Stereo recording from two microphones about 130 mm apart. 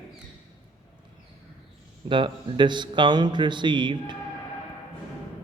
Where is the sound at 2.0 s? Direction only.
40° right (ahead or behind).